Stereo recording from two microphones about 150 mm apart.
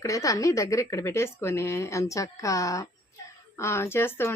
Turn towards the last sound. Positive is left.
turn(degrees=15)  # may be behind; listen again after turning